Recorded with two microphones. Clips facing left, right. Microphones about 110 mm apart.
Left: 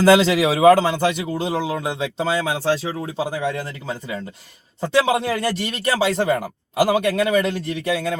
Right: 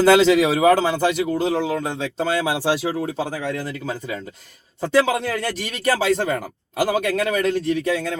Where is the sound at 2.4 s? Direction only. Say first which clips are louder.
Even; 10° right (ahead or behind).